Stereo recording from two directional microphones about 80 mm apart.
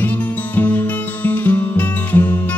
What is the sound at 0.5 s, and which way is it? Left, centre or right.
Music, left.